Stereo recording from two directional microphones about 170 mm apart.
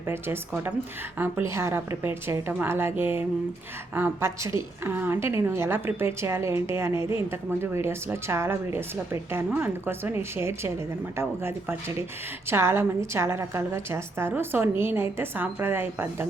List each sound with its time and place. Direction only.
0.1 s a woman's voice: 15° right (ahead or behind)